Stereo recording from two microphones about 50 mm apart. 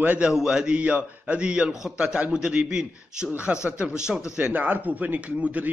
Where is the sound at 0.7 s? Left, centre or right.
Right.